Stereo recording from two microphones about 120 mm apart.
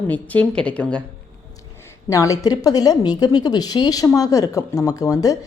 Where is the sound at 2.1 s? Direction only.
25° left (ahead or behind).